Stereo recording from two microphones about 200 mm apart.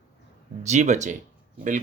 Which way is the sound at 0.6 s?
35° right (ahead or behind).